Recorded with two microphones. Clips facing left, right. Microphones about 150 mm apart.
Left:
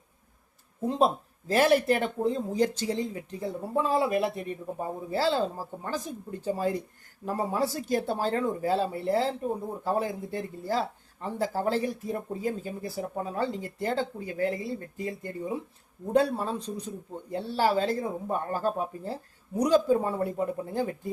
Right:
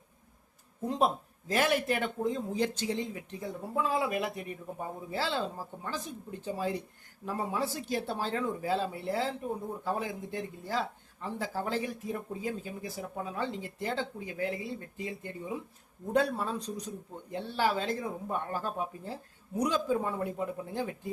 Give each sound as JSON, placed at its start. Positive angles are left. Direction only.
{"t": 0.9, "sound": "speech", "side_deg": 30}
{"t": 16.1, "sound": "speech", "side_deg": 30}